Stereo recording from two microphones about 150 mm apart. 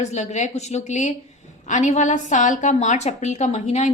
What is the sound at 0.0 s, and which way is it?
A woman's voice, 50° left (ahead or behind).